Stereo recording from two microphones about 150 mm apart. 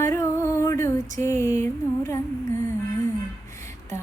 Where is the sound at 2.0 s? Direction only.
20° left (ahead or behind).